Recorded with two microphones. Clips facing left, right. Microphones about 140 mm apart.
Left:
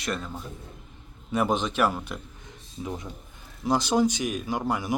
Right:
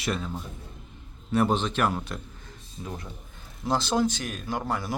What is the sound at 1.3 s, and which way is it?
Speech, 10° left (ahead or behind).